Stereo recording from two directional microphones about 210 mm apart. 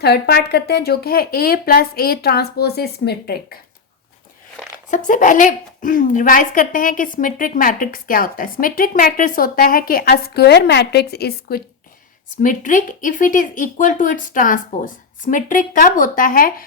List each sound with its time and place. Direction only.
0.0 s speech: 50° left (ahead or behind)
4.9 s speech: 35° left (ahead or behind)